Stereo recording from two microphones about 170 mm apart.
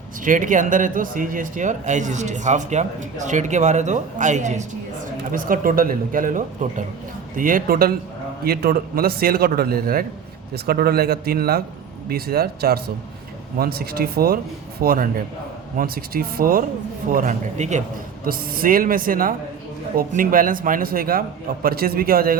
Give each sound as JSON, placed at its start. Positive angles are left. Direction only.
{"t": 0.3, "sound": "speech", "side_deg": -50}
{"t": 5.3, "sound": "a man's voice", "side_deg": -55}
{"t": 18.3, "sound": "a man's voice", "side_deg": -60}